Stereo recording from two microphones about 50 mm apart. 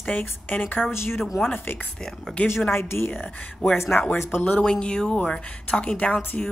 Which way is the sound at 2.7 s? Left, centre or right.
Left.